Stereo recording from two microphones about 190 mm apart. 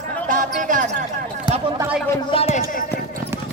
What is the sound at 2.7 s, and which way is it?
Speech, 45° left (ahead or behind).